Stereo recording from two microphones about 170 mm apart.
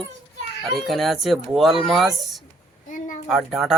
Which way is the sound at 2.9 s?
50° left (ahead or behind).